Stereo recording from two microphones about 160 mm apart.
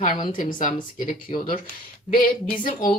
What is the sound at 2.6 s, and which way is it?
Speech, 65° left (ahead or behind).